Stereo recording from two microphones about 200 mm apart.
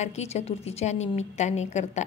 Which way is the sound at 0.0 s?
35° left (ahead or behind).